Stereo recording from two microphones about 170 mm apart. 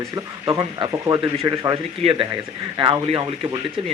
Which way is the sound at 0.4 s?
20° right (ahead or behind).